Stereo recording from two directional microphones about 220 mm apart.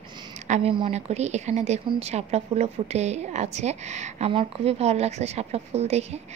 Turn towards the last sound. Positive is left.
turn(degrees=-30)  # may be behind; listen again after turning